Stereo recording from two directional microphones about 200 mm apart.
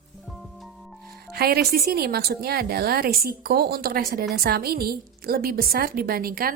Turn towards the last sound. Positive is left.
turn(degrees=-45)  # may be behind; listen again after turning